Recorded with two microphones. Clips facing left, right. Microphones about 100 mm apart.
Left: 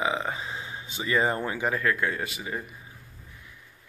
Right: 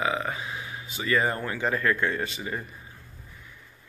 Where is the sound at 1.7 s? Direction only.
5° left (ahead or behind).